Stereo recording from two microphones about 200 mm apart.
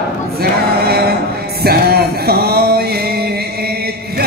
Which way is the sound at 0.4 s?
50° right (ahead or behind).